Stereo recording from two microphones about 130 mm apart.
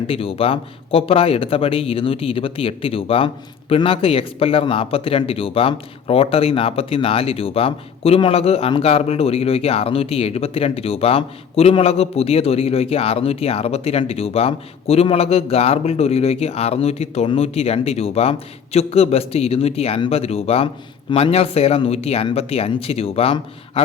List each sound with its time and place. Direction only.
0.1 s speech: 45° left (ahead or behind)